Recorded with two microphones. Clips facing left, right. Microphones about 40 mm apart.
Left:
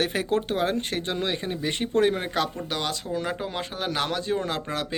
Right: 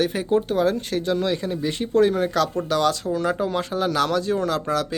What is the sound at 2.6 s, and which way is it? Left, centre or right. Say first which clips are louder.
Speech: right 8 dB; centre.